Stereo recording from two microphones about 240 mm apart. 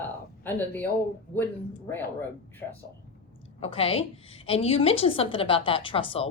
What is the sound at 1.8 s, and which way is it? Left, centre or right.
Speech, centre.